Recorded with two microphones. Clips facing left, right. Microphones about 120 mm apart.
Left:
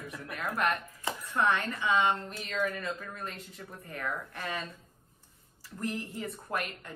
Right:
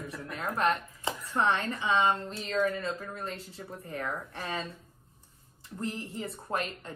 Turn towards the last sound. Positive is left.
turn(degrees=-30)  # may be behind; listen again after turning